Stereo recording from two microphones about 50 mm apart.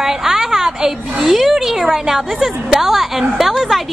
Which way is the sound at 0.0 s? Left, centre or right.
Centre.